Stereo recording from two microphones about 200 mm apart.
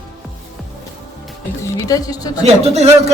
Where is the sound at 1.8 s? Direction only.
15° left (ahead or behind).